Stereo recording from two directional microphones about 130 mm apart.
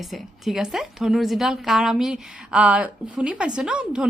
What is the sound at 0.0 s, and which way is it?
A woman's voice, centre (ahead or behind).